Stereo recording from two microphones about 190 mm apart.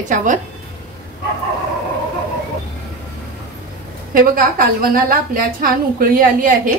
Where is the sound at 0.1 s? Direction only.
40° right (ahead or behind).